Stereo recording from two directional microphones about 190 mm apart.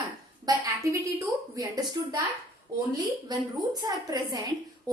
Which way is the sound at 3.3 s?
20° right (ahead or behind).